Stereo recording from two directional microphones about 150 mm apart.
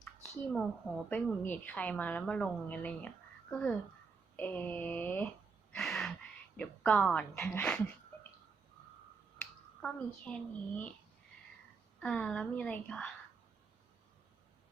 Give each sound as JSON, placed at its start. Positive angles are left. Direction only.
{"t": 0.0, "sound": "a sound", "side_deg": 5}
{"t": 1.1, "sound": "a woman's voice", "side_deg": 10}
{"t": 5.7, "sound": "gasp", "side_deg": 5}
{"t": 6.6, "sound": "a woman's voice", "side_deg": 10}
{"t": 9.4, "sound": "a child's voice", "side_deg": 5}
{"t": 11.9, "sound": "a woman's voice", "side_deg": 5}